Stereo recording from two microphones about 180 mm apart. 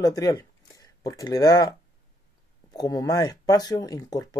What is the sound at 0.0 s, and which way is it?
Speech, 20° left (ahead or behind).